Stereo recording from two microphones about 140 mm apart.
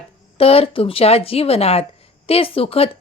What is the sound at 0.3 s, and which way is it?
Speech, 45° left (ahead or behind).